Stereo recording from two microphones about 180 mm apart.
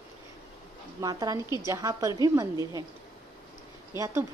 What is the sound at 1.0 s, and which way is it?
A woman's voice, 20° right (ahead or behind).